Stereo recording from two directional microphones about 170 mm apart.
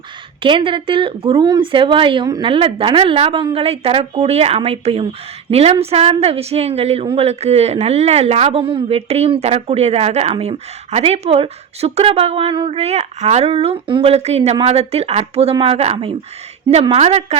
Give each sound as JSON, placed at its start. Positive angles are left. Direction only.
{"t": 0.4, "sound": "speech", "side_deg": -30}